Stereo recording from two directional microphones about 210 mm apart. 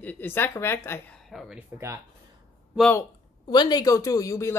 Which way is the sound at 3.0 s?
20° left (ahead or behind).